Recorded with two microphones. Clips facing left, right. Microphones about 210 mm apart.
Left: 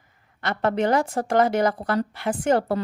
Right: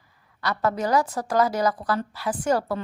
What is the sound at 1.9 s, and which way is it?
Speech, 55° left (ahead or behind).